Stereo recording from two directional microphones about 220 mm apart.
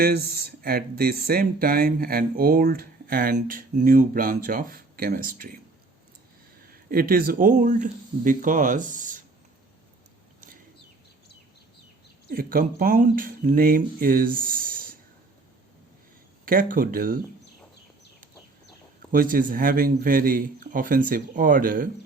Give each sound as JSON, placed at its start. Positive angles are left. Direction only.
{"t": 0.0, "sound": "speech", "side_deg": -45}
{"t": 6.9, "sound": "speech", "side_deg": -40}
{"t": 12.3, "sound": "speech", "side_deg": -40}
{"t": 16.5, "sound": "speech", "side_deg": -40}
{"t": 19.1, "sound": "speech", "side_deg": -40}